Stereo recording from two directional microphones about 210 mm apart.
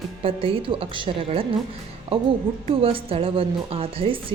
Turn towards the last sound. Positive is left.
turn(degrees=-25)  # may be behind; listen again after turning